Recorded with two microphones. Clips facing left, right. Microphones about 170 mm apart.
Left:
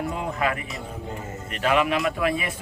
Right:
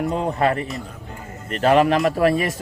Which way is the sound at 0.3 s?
40° right (ahead or behind).